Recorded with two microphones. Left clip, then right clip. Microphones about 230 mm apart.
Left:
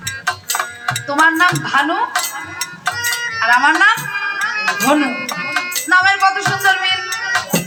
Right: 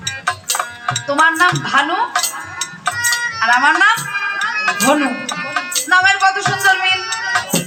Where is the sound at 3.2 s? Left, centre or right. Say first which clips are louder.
Left 1 dB; centre.